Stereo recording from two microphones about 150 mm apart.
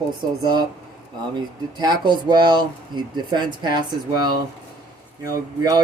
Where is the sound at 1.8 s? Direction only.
30° right (ahead or behind).